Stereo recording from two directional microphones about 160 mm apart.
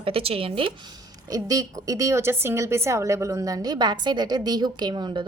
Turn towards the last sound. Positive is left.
turn(degrees=-30)  # may be behind; listen again after turning